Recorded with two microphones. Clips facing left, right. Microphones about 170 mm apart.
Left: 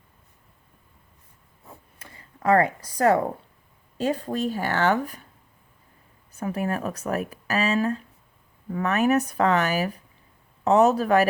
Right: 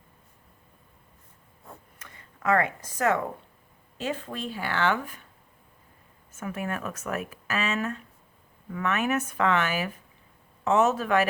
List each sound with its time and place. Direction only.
2.0 s speech: 30° left (ahead or behind)
6.3 s speech: 35° left (ahead or behind)